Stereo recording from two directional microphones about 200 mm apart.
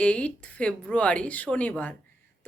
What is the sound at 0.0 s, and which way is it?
Speech, 5° left (ahead or behind).